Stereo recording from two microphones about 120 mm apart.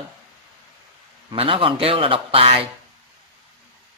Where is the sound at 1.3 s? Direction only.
50° right (ahead or behind).